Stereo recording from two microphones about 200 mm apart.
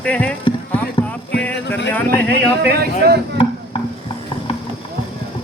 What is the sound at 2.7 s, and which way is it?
Speech, 50° right (ahead or behind).